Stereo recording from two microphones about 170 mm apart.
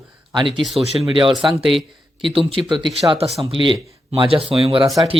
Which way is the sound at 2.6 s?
30° right (ahead or behind).